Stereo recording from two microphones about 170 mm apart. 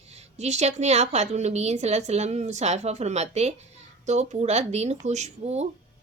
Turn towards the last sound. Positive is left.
turn(degrees=-40)  # may be behind; listen again after turning